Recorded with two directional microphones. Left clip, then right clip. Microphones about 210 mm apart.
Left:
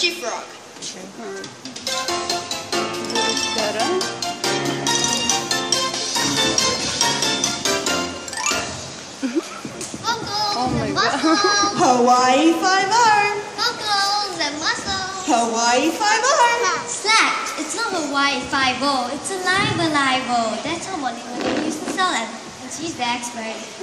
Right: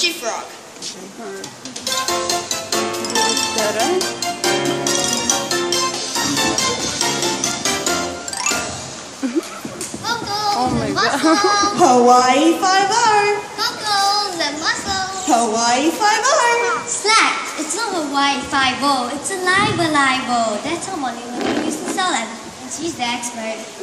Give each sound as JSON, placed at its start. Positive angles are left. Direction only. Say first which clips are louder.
{"t": 1.9, "sound": "music", "louder": "right 3 dB", "side_deg": -30}
{"t": 3.5, "sound": "music", "louder": "right 3 dB", "side_deg": -15}
{"t": 4.4, "sound": "music", "louder": "right 4 dB", "side_deg": 20}
{"t": 10.0, "sound": "a sound", "louder": "right 2 dB", "side_deg": 25}
{"t": 11.1, "sound": "speech", "louder": "right 4 dB", "side_deg": -10}
{"t": 11.3, "sound": "music", "louder": "right 2 dB", "side_deg": 25}
{"t": 17.0, "sound": "children playing", "louder": "right 2 dB", "side_deg": 25}
{"t": 17.7, "sound": "a woman's voice", "louder": "right 2 dB", "side_deg": 30}
{"t": 21.4, "sound": "a sound", "louder": "right 3 dB", "side_deg": 25}